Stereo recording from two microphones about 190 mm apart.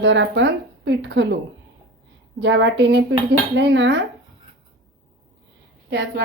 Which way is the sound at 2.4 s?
75° right (ahead or behind).